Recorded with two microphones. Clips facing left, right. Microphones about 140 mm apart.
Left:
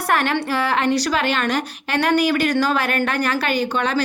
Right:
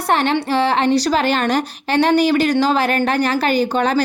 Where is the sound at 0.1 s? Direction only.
25° right (ahead or behind).